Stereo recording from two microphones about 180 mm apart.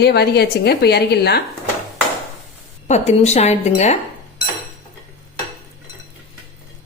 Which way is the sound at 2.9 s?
40° left (ahead or behind).